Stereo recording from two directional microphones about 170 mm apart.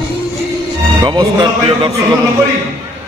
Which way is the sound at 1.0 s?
25° right (ahead or behind).